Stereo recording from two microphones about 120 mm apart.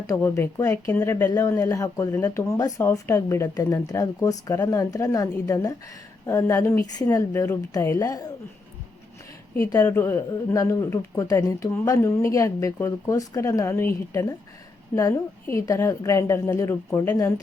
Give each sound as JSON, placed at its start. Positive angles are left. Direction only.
{"t": 0.1, "sound": "speech", "side_deg": 25}
{"t": 9.7, "sound": "speech", "side_deg": 20}